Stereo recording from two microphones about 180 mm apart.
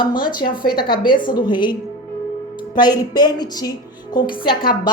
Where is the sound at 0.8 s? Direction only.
25° left (ahead or behind).